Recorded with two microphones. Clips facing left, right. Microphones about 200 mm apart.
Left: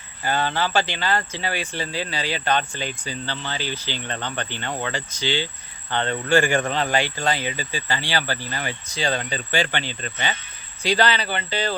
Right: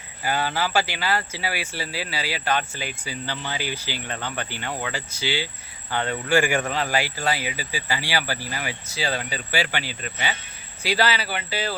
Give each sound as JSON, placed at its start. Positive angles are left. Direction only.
{"t": 0.2, "sound": "speech", "side_deg": -10}